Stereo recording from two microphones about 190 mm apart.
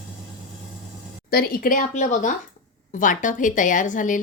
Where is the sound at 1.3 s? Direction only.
55° left (ahead or behind).